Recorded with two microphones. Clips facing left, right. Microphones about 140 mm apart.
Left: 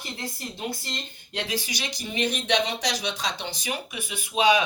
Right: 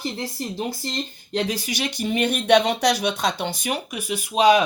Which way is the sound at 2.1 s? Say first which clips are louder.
Right 8 dB; 55° right (ahead or behind).